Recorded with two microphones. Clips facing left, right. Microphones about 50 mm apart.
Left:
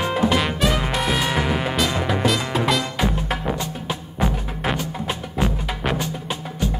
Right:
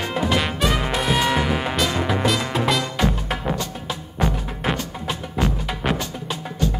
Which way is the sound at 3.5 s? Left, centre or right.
Centre.